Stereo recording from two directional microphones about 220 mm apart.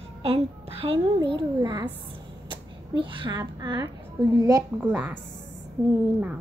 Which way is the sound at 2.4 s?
20° right (ahead or behind).